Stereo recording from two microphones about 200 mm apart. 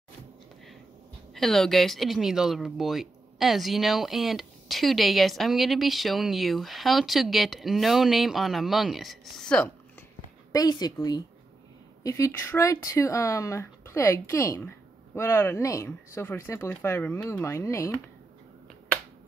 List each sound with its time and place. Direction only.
1.3 s speech: centre (ahead or behind)
10.5 s a woman's voice: 20° left (ahead or behind)